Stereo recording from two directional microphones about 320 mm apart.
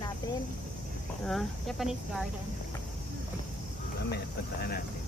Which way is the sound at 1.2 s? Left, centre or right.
Centre.